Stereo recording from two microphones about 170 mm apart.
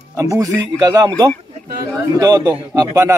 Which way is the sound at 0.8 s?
20° right (ahead or behind).